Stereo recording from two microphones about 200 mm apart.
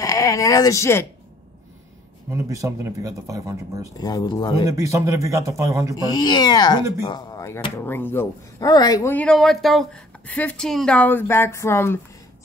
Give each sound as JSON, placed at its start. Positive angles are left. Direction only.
{"t": 0.0, "sound": "speech", "side_deg": 15}
{"t": 2.3, "sound": "speech", "side_deg": -15}
{"t": 4.0, "sound": "speech", "side_deg": 20}
{"t": 4.6, "sound": "speech", "side_deg": -15}
{"t": 6.0, "sound": "speech", "side_deg": 20}